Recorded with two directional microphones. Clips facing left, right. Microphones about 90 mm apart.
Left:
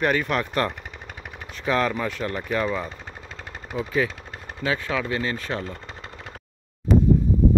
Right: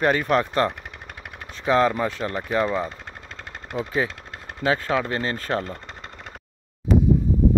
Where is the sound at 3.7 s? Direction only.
15° right (ahead or behind).